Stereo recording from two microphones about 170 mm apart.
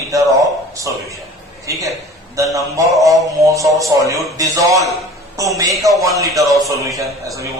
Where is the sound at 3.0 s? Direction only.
20° right (ahead or behind).